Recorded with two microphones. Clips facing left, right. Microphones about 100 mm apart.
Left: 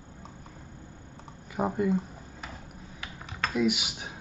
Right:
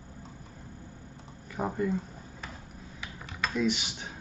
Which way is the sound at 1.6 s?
15° left (ahead or behind).